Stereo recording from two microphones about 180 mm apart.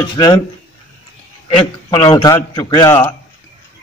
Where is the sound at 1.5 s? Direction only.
25° left (ahead or behind).